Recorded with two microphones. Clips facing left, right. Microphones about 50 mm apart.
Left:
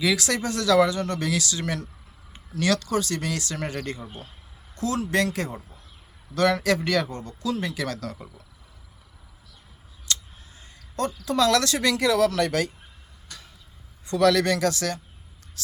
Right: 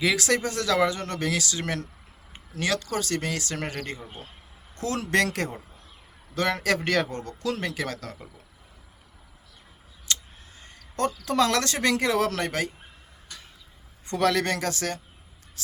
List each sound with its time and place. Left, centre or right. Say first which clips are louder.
0.0 s speech: even; right
2.3 s speech: left 3 dB; right
3.8 s speech: left 2 dB; right
4.7 s a sound: left 3 dB; right
4.9 s a man's voice: right 1 dB; right
6.3 s speech: left 3 dB; right
7.8 s speech: left 2 dB; right
10.1 s a sound: left 1 dB; right
10.6 s speech: right 1 dB; right
14.1 s speech: left 4 dB; right
15.6 s a sound: left 2 dB; right